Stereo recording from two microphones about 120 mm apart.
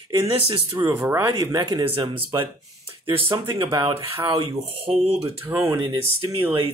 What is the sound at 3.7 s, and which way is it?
Speech, 45° right (ahead or behind).